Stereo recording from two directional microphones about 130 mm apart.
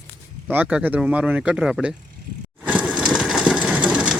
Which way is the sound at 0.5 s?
10° right (ahead or behind).